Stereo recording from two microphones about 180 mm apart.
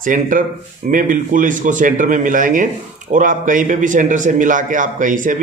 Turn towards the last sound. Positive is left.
turn(degrees=-45)  # may be behind; listen again after turning